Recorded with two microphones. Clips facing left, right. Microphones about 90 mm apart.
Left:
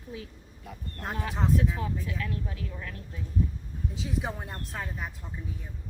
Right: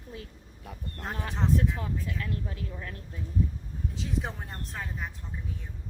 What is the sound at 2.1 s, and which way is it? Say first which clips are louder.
Speech: even; 35° right (ahead or behind).